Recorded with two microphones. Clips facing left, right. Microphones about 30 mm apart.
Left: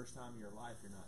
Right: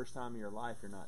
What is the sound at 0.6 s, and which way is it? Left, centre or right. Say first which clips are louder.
Speech: right 8 dB; right.